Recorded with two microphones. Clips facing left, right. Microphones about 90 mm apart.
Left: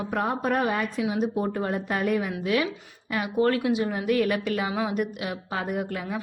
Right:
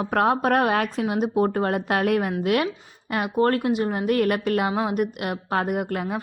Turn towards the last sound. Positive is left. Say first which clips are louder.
# right 4 dB
turn(degrees=-50)  # may be behind; listen again after turning